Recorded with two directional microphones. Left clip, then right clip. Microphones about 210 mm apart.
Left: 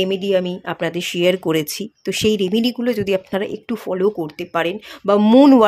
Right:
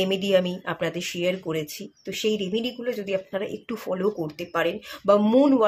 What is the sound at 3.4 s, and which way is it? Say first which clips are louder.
Speech: left 6 dB; 30° left (ahead or behind).